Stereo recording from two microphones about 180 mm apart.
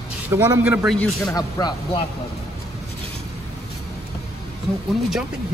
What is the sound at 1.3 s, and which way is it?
Speech, 20° left (ahead or behind).